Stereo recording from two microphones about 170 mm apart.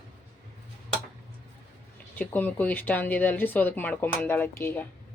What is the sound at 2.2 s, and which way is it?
Speech, 10° left (ahead or behind).